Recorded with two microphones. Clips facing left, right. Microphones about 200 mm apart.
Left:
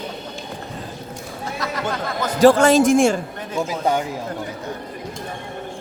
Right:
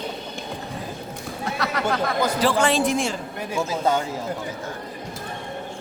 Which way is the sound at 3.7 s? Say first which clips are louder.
Left 1 dB; 15° left (ahead or behind).